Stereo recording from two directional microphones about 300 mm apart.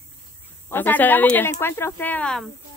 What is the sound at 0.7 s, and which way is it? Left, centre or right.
Speech, centre.